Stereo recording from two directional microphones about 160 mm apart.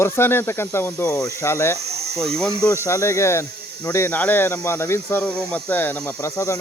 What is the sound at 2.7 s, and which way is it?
Speech, 20° left (ahead or behind).